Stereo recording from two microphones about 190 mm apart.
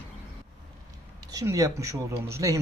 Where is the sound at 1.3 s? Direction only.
15° right (ahead or behind).